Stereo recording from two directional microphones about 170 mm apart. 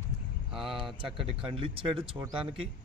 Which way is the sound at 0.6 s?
30° right (ahead or behind).